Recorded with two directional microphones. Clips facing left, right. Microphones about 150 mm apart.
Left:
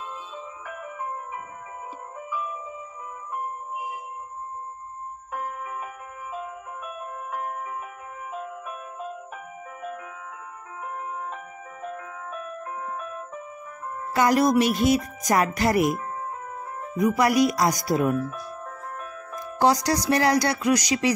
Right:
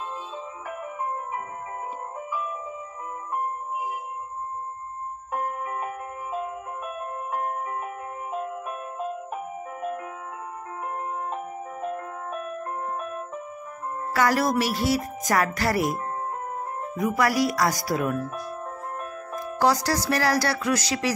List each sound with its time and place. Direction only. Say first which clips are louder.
0.7 s music: right 3 dB; 50° right (ahead or behind)
5.3 s music: right 3 dB; 45° right (ahead or behind)
9.3 s music: right 6 dB; 35° right (ahead or behind)
14.1 s speech: left 3 dB; 20° left (ahead or behind)
17.0 s speech: left 3 dB; 20° left (ahead or behind)
19.6 s speech: left 2 dB; 20° left (ahead or behind)